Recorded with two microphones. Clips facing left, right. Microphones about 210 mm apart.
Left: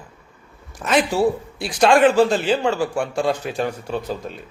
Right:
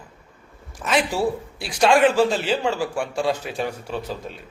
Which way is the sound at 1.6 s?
5° right (ahead or behind).